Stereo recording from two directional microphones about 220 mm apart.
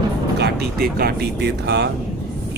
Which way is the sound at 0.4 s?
45° right (ahead or behind).